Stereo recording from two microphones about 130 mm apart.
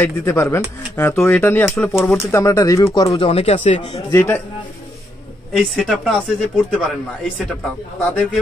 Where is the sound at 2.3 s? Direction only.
20° left (ahead or behind).